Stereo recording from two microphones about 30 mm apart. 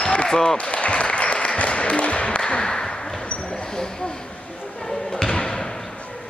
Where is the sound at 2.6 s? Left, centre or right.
Left.